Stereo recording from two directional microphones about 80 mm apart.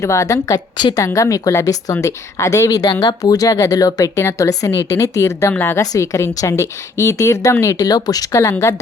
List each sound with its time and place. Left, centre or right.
0.0 s a woman's voice: left
5.8 s a woman's voice: left